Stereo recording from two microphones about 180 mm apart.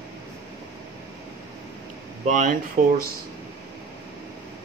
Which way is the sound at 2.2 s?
45° right (ahead or behind).